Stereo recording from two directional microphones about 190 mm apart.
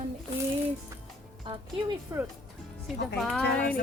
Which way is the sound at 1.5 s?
20° right (ahead or behind).